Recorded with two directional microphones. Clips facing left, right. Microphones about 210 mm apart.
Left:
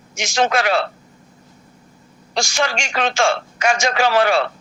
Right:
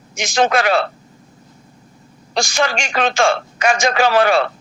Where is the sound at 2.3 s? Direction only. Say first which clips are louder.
Right 2 dB; 55° right (ahead or behind).